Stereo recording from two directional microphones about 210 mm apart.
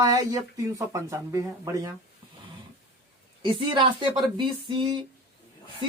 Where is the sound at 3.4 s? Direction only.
25° right (ahead or behind).